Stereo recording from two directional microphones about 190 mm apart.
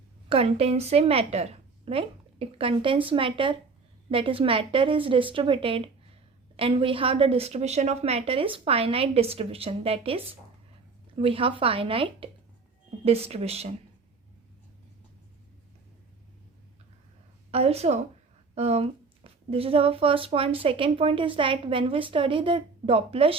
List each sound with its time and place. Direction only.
0.3 s a woman's voice: 30° right (ahead or behind)
11.2 s a woman's voice: 30° right (ahead or behind)
17.5 s a woman's voice: 35° right (ahead or behind)